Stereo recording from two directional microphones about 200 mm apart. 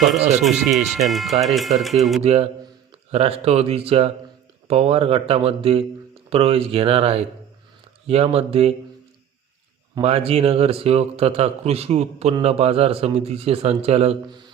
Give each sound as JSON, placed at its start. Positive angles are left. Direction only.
{"t": 0.9, "sound": "speech", "side_deg": 0}
{"t": 2.2, "sound": "a man's voice", "side_deg": -30}
{"t": 9.9, "sound": "a man's voice", "side_deg": -30}